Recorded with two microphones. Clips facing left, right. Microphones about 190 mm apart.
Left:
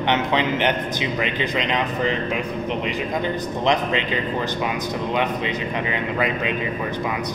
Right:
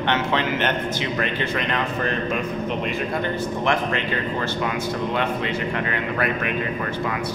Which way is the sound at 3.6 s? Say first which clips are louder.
Left 3 dB; 20° left (ahead or behind).